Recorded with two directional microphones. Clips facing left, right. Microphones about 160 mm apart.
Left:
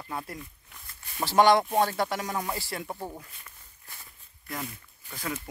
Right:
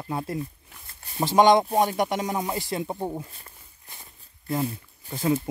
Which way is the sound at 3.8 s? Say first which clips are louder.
Right 2 dB; 25° right (ahead or behind).